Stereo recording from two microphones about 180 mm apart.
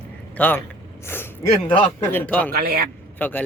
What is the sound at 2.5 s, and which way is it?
Speech, 55° right (ahead or behind).